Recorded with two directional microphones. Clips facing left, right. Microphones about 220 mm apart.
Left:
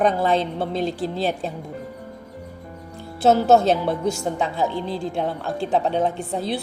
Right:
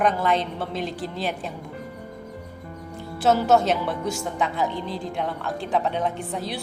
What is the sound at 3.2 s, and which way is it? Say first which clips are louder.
A woman's voice: left 3 dB; 30° left (ahead or behind).